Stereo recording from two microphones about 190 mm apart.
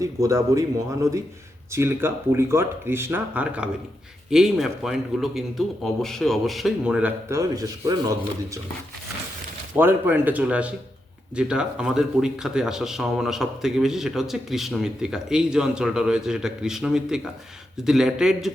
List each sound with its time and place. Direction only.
0.0 s speech: 15° right (ahead or behind)
9.7 s speech: 10° right (ahead or behind)